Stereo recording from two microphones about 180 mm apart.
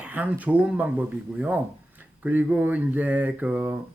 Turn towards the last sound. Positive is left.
turn(degrees=-10)  # may be behind; listen again after turning